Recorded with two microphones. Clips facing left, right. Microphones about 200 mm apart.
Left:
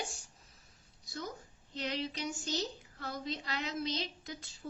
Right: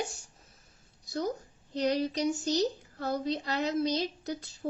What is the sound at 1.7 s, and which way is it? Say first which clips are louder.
A woman's voice: right 9 dB; 40° right (ahead or behind).